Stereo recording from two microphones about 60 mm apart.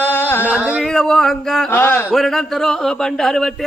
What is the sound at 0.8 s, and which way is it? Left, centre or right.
Speech, centre.